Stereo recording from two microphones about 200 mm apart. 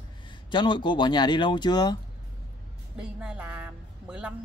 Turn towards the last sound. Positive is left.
turn(degrees=-5)  # may be behind; listen again after turning